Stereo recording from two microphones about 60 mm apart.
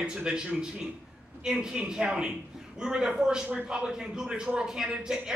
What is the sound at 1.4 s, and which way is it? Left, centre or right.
A man's voice, centre.